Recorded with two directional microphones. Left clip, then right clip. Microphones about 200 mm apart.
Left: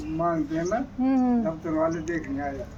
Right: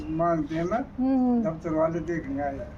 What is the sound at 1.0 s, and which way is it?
Speech, centre (ahead or behind).